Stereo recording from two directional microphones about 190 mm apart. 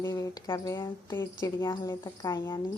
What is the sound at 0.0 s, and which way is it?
Speech, 20° left (ahead or behind).